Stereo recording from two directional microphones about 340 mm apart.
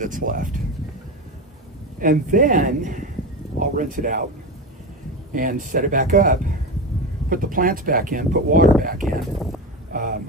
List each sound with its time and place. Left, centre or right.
0.0 s speech: right
2.0 s speech: right
5.3 s speech: right
9.9 s a sound: right